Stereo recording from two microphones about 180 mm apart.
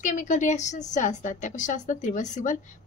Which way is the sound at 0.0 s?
45° left (ahead or behind).